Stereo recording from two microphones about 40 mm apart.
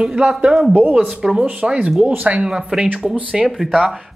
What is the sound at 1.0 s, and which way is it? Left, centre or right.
Speech, centre.